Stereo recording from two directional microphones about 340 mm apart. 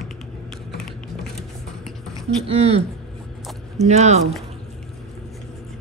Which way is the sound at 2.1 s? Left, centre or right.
Centre.